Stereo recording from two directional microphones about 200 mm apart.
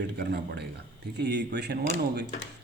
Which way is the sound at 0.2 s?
55° right (ahead or behind).